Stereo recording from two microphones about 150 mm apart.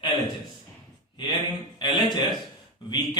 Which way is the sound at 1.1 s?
30° left (ahead or behind).